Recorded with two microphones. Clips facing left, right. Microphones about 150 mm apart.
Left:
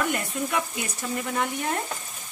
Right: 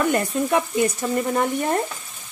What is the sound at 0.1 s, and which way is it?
Speech, 40° right (ahead or behind).